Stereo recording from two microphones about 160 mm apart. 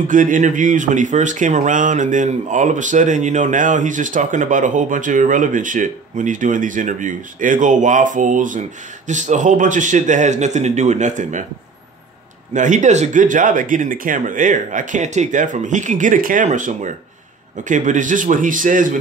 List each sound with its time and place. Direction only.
0.1 s speech: 55° right (ahead or behind)
12.5 s speech: 50° right (ahead or behind)